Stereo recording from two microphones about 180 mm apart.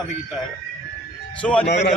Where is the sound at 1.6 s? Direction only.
75° left (ahead or behind).